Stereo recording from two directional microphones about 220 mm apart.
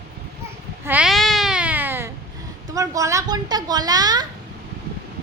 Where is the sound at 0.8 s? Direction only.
5° right (ahead or behind).